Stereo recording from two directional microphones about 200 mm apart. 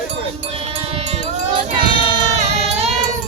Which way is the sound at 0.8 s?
30° right (ahead or behind).